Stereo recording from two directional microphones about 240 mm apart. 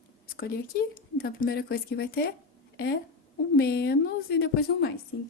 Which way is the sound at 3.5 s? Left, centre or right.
Left.